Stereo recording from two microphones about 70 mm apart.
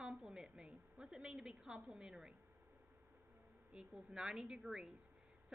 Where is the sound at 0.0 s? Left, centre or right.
Centre.